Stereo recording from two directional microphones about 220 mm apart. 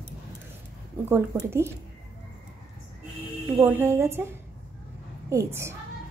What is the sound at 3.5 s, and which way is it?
A woman's voice, 10° right (ahead or behind).